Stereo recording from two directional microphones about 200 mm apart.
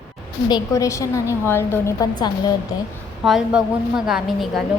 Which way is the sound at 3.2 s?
5° right (ahead or behind).